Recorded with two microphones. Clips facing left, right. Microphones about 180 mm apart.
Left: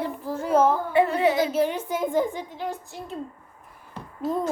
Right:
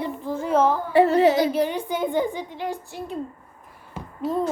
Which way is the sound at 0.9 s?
35° right (ahead or behind).